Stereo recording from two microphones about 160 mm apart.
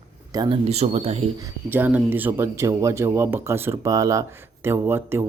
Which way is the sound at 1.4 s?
10° right (ahead or behind).